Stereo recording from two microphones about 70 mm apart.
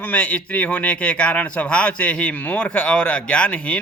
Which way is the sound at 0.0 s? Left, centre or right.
Left.